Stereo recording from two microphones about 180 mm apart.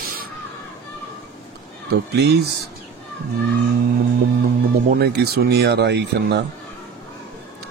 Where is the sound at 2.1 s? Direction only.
65° right (ahead or behind).